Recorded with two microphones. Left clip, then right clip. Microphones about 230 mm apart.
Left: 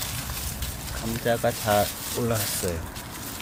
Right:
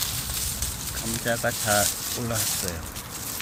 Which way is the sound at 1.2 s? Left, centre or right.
Centre.